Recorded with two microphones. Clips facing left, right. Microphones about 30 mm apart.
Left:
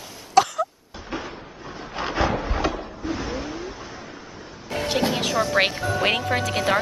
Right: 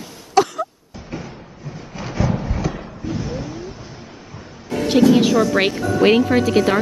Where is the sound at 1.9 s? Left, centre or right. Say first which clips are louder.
Even; left.